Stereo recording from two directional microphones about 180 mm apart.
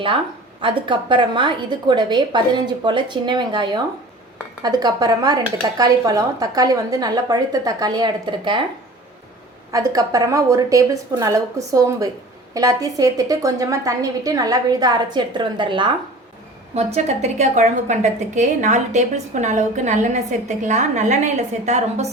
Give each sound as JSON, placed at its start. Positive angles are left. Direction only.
{"t": 0.6, "sound": "speech", "side_deg": -25}
{"t": 9.7, "sound": "speech", "side_deg": -20}
{"t": 16.7, "sound": "a woman's voice", "side_deg": -35}